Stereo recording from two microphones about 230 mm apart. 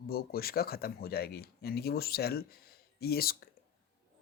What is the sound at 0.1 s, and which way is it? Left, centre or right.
Speech, left.